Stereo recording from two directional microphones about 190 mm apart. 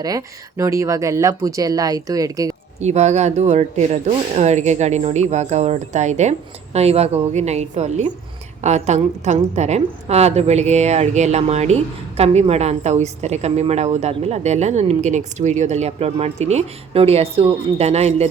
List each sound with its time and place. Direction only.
0.0 s speech: 20° right (ahead or behind)
2.8 s a woman's voice: 35° right (ahead or behind)